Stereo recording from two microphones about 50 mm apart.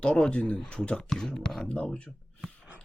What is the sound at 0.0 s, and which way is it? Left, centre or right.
Speech, left.